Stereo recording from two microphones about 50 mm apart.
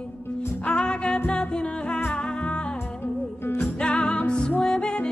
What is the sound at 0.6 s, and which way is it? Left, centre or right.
Music, centre.